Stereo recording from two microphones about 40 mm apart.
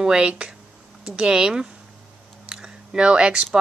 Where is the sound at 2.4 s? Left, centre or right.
Centre.